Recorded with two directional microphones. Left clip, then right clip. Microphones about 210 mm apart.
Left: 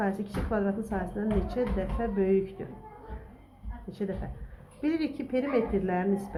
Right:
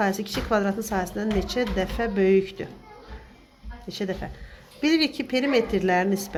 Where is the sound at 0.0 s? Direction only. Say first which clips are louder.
Right 6 dB; 35° right (ahead or behind).